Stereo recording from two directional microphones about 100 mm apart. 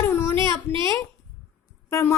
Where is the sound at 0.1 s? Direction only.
25° left (ahead or behind).